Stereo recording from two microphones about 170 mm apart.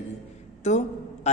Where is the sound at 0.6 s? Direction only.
45° left (ahead or behind).